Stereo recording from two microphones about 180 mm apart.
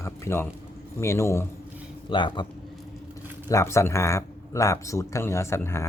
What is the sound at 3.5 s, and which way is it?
Speech, 15° left (ahead or behind).